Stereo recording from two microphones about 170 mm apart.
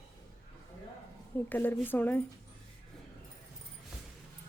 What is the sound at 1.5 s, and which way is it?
Speech, 10° left (ahead or behind).